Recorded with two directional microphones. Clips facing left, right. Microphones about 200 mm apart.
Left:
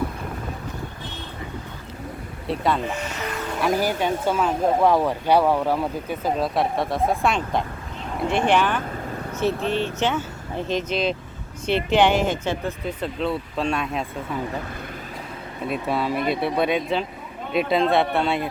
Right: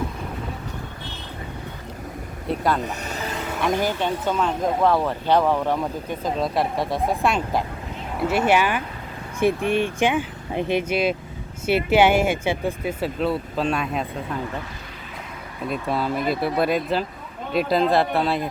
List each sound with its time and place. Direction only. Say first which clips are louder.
2.5 s speech: even; centre (ahead or behind)
2.8 s music: left 1 dB; 35° right (ahead or behind)
3.6 s speech: left 1 dB; 5° left (ahead or behind)
15.6 s speech: even; centre (ahead or behind)